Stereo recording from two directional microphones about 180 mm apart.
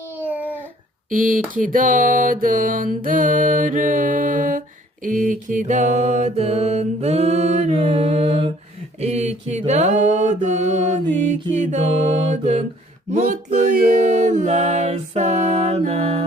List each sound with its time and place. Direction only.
0.2 s a sound: 10° right (ahead or behind)
1.1 s music: 50° right (ahead or behind)
5.0 s mantra: 45° right (ahead or behind)